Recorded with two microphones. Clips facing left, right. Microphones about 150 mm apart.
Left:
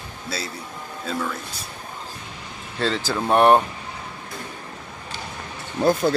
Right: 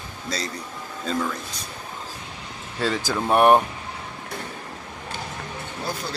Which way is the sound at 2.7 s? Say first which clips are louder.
Left 1 dB; 10° right (ahead or behind).